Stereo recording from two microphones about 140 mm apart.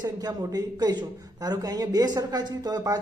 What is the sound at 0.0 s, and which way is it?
Speech, 30° right (ahead or behind).